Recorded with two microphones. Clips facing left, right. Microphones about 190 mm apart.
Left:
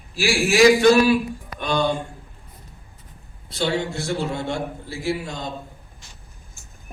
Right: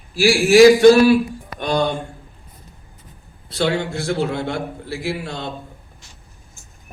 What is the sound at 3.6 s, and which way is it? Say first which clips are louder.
A man's voice: right 3 dB; 65° right (ahead or behind).